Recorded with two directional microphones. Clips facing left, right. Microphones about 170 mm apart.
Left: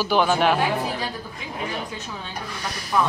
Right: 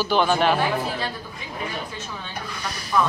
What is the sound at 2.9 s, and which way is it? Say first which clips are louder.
Speech: even; 10° left (ahead or behind).